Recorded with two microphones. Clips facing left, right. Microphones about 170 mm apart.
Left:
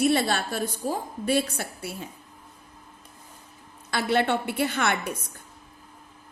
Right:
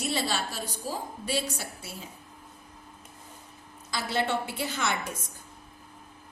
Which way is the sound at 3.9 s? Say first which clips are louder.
Left 5 dB; 60° left (ahead or behind).